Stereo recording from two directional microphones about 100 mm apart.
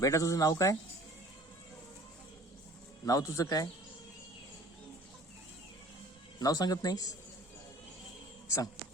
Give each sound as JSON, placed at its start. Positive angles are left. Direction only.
{"t": 0.0, "sound": "speech", "side_deg": 35}
{"t": 3.1, "sound": "speech", "side_deg": 35}
{"t": 6.4, "sound": "speech", "side_deg": 40}
{"t": 8.4, "sound": "speech", "side_deg": 30}